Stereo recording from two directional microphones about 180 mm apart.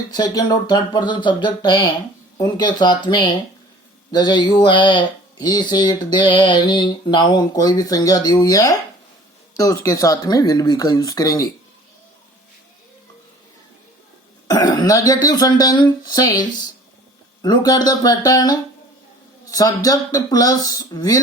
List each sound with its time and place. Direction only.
0.1 s speech: 20° left (ahead or behind)
14.4 s speech: 20° left (ahead or behind)